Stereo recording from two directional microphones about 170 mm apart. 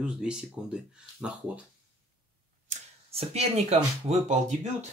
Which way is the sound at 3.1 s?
40° right (ahead or behind).